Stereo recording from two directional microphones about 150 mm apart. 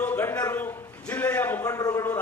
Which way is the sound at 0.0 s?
15° left (ahead or behind).